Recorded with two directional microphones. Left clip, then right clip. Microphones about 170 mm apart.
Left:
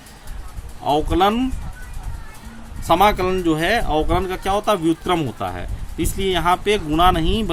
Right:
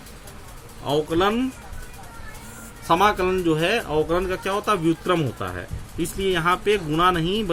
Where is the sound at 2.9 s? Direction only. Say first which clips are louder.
Left 3 dB; 35° left (ahead or behind).